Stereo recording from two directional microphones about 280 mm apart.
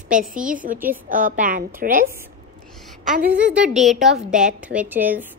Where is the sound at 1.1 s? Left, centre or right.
Right.